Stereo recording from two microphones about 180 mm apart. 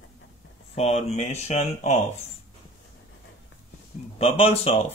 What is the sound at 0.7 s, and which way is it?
Speech, 35° left (ahead or behind).